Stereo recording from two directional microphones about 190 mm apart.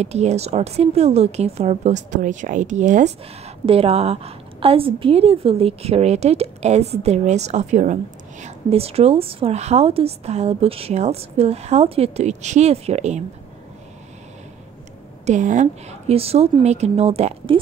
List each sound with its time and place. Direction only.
0.0 s a woman's voice: 35° right (ahead or behind)
15.2 s a woman's voice: 40° right (ahead or behind)